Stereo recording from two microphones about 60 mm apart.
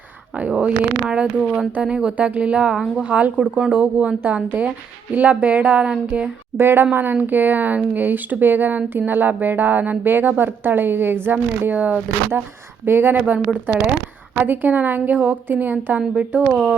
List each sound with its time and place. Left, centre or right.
0.3 s a woman's voice: centre
6.6 s speech: right
12.8 s speech: right
13.1 s a woman's voice: right